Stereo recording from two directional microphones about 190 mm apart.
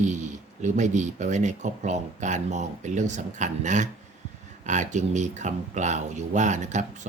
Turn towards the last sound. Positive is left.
turn(degrees=-40)  # may be behind; listen again after turning